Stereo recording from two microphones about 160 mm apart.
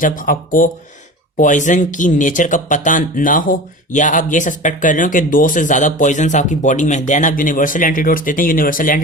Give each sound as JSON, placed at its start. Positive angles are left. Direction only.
{"t": 0.0, "sound": "speech", "side_deg": 60}